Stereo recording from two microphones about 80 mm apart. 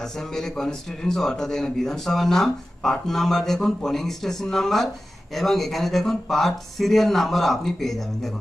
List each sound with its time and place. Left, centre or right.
0.0 s a man's voice: centre